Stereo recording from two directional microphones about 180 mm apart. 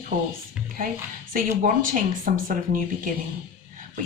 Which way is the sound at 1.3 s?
45° right (ahead or behind).